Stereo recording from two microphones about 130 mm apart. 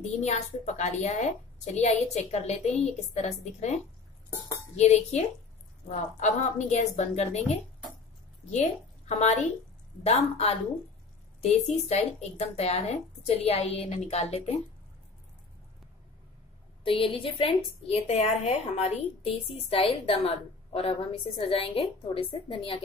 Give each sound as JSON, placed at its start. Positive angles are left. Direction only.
{"t": 0.2, "sound": "a woman's voice", "side_deg": 60}
{"t": 16.8, "sound": "a woman's voice", "side_deg": 45}